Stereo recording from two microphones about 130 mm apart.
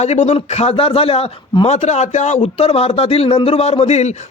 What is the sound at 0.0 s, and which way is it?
A man's voice, 60° left (ahead or behind).